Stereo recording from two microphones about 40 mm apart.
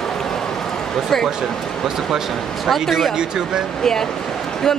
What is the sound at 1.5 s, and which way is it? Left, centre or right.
Speech, centre.